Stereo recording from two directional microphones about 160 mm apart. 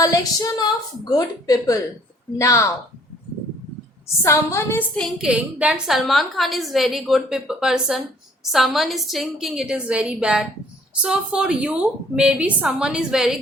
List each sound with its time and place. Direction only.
0.0 s a woman's voice: 20° left (ahead or behind)
4.2 s a woman's voice: 15° left (ahead or behind)
5.0 s a woman's voice: 5° right (ahead or behind)